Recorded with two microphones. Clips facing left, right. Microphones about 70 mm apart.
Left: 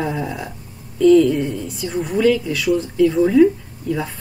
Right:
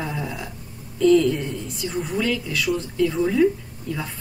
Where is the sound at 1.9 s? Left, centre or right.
Centre.